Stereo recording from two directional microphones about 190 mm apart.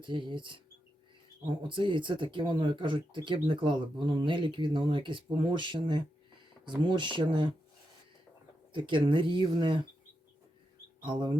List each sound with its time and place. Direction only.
0.0 s speech: 25° right (ahead or behind)
1.6 s speech: 25° right (ahead or behind)
8.7 s speech: 25° right (ahead or behind)
11.0 s speech: 25° right (ahead or behind)